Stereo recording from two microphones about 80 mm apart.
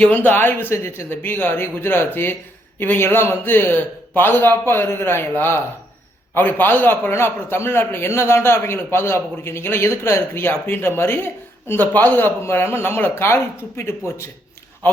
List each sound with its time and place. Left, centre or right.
0.3 s speech: left
6.3 s a man's voice: left